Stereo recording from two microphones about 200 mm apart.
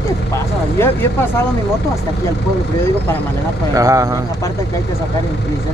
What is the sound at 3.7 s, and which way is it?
Speech, 15° right (ahead or behind).